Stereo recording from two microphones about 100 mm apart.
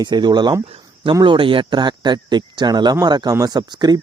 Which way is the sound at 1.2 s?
55° right (ahead or behind).